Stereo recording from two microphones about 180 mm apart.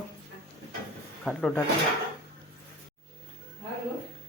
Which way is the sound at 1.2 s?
5° left (ahead or behind).